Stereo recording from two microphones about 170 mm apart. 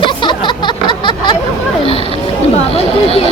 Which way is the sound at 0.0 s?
30° left (ahead or behind).